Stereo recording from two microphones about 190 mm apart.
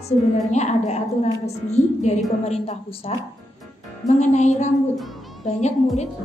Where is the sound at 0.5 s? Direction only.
35° left (ahead or behind).